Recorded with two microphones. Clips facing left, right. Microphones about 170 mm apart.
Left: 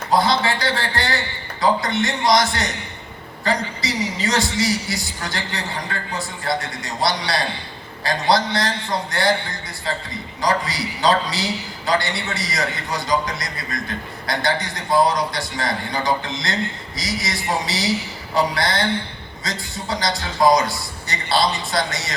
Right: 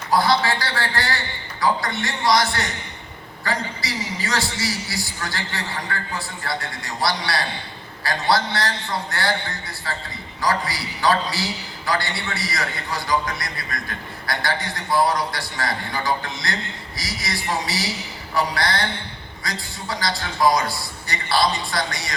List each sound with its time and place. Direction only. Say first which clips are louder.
0.1 s a man's voice: left 1 dB; 20° left (ahead or behind)
10.4 s a man's voice: left 2 dB; 20° left (ahead or behind)